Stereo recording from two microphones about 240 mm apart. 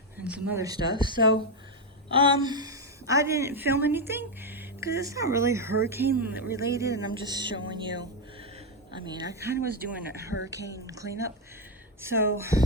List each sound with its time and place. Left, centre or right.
0.3 s a woman's voice: centre
10.7 s speech: centre